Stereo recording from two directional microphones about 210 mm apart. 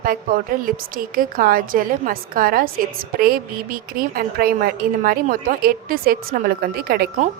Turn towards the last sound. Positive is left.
turn(degrees=-45)  # may be behind; listen again after turning